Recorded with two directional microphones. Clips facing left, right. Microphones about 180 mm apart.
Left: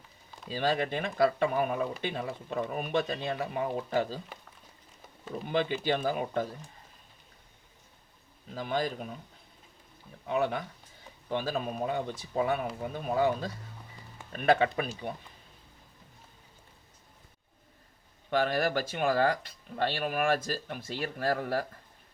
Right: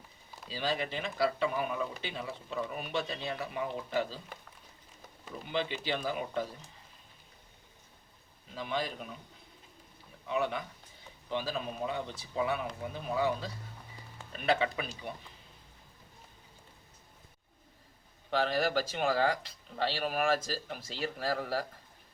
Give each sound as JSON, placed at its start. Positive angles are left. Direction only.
{"t": 0.4, "sound": "speech", "side_deg": 50}
{"t": 5.5, "sound": "speech", "side_deg": 45}
{"t": 8.5, "sound": "speech", "side_deg": 45}
{"t": 10.2, "sound": "speech", "side_deg": 50}
{"t": 18.3, "sound": "speech", "side_deg": 55}